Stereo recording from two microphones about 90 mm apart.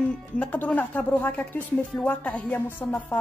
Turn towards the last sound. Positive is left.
turn(degrees=20)  # may be behind; listen again after turning